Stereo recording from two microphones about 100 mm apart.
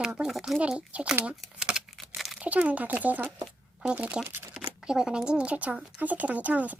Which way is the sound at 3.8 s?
15° right (ahead or behind).